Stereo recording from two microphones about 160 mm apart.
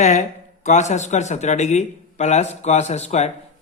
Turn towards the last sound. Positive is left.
turn(degrees=45)  # may be behind; listen again after turning